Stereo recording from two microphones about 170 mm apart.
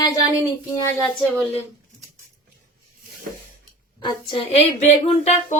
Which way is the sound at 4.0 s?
30° left (ahead or behind).